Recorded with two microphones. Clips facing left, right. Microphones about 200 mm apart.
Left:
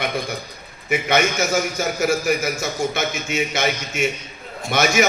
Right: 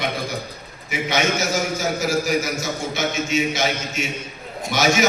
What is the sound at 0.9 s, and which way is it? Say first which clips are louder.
A man's voice: left 2 dB; 55° left (ahead or behind).